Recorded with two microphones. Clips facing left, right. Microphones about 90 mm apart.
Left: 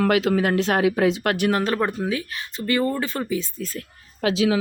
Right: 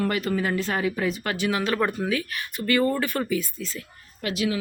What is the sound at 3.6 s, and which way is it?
Speech, 50° left (ahead or behind).